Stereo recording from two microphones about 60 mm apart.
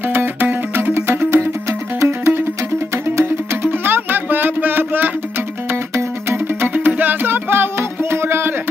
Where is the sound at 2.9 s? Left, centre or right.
Right.